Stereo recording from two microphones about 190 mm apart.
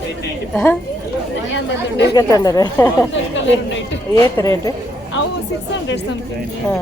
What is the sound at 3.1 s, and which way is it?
Speech, 75° left (ahead or behind).